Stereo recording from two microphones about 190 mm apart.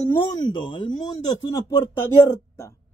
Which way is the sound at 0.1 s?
25° left (ahead or behind).